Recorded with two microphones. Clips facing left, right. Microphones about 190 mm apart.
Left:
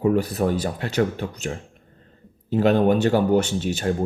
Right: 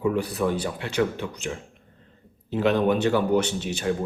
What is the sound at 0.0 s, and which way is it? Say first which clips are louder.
Speech: left 3 dB; 40° left (ahead or behind).